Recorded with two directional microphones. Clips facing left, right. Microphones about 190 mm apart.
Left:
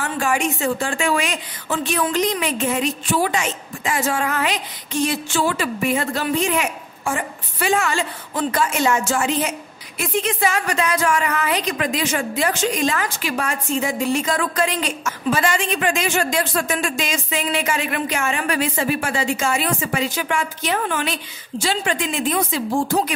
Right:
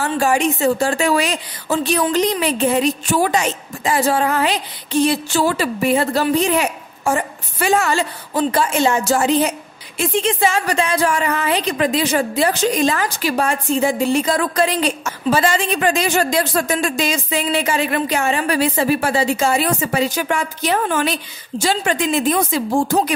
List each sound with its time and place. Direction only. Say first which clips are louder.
0.0 s a woman's voice: right 4 dB; 35° right (ahead or behind)